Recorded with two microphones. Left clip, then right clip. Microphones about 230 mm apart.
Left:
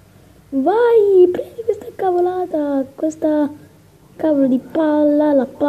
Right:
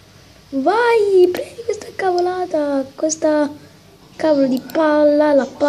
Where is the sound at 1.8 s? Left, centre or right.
Centre.